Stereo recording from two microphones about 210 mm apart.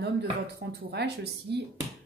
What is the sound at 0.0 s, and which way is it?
Speech, 50° right (ahead or behind).